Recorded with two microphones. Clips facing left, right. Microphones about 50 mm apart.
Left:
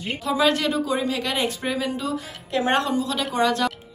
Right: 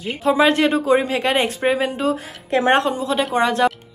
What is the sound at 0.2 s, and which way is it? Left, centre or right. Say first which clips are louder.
Speech: right 6 dB; right.